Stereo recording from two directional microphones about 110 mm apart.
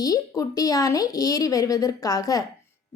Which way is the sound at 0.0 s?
35° left (ahead or behind).